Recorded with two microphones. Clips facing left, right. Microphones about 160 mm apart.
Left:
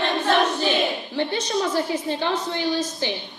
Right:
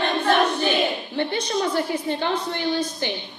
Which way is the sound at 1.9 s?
55° right (ahead or behind).